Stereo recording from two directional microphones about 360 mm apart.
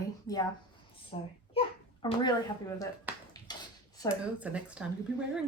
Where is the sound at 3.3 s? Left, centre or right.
Centre.